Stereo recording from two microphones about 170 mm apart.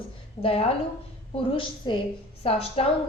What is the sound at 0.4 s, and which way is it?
A woman's voice, 35° left (ahead or behind).